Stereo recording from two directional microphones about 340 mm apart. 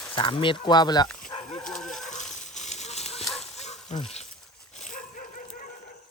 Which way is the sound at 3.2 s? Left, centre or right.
Centre.